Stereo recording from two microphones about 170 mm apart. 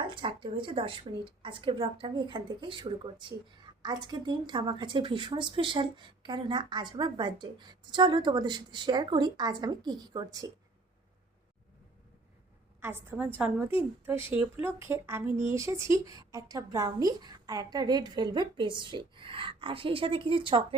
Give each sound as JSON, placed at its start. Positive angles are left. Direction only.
{"t": 0.0, "sound": "a woman's voice", "side_deg": -30}
{"t": 12.8, "sound": "a woman's voice", "side_deg": -10}